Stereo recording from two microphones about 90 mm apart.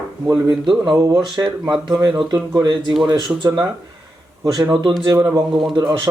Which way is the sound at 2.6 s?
60° right (ahead or behind).